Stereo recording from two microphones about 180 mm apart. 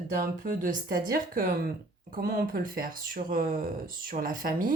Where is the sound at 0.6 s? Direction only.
50° right (ahead or behind).